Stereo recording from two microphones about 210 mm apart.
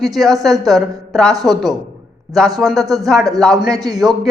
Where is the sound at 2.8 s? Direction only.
15° right (ahead or behind).